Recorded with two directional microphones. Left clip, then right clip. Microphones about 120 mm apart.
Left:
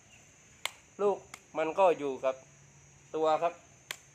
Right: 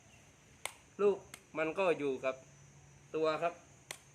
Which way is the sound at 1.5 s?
40° right (ahead or behind).